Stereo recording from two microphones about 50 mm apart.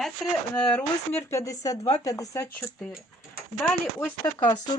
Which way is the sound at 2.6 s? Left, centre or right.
Left.